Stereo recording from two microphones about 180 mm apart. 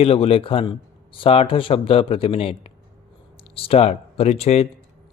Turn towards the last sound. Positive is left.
turn(degrees=35)  # may be behind; listen again after turning